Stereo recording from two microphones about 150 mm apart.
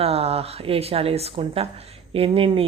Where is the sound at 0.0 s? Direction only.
40° right (ahead or behind).